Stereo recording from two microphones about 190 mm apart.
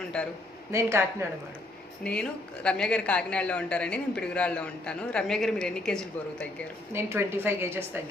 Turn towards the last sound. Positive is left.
turn(degrees=-10)  # may be behind; listen again after turning